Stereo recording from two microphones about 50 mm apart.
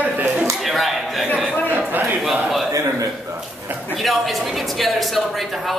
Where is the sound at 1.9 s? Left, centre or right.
Right.